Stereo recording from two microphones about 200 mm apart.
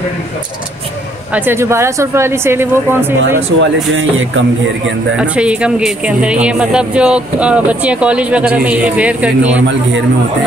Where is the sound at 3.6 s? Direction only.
75° right (ahead or behind).